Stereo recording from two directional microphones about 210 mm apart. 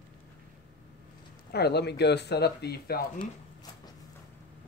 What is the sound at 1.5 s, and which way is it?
Speech, 50° left (ahead or behind).